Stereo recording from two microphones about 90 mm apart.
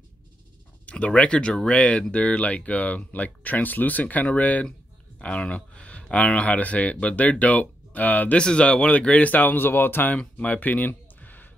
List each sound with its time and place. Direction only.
0.8 s speech: 15° left (ahead or behind)